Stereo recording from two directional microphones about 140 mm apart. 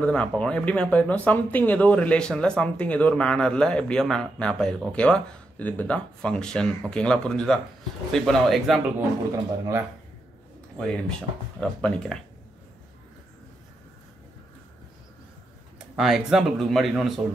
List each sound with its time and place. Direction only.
0.0 s speech: 5° left (ahead or behind)
10.8 s speech: 5° left (ahead or behind)
16.0 s speech: centre (ahead or behind)